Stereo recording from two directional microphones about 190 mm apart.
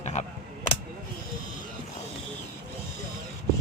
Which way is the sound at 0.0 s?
35° left (ahead or behind).